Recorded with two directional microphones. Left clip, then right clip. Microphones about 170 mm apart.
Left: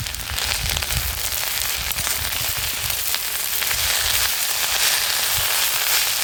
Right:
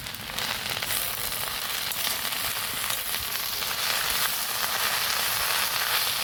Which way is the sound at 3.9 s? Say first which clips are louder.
Left 4 dB; 25° left (ahead or behind).